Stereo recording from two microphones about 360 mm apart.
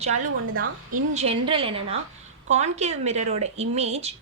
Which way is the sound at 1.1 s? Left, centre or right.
Centre.